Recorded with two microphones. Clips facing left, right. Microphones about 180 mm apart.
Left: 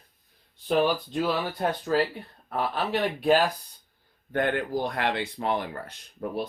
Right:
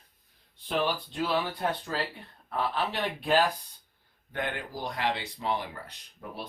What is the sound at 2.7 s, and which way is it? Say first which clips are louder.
Speech: left 4 dB; 45° left (ahead or behind).